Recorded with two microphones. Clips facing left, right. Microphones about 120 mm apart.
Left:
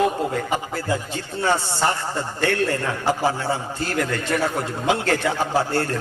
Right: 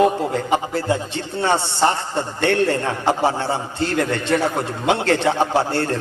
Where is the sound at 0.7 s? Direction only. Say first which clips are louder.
Right 4 dB; 25° right (ahead or behind).